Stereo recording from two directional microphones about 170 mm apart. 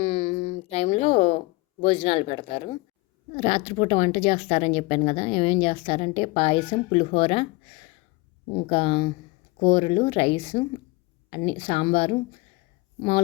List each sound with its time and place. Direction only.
0.0 s a sound: 35° left (ahead or behind)
1.8 s speech: 30° left (ahead or behind)
8.7 s speech: 30° left (ahead or behind)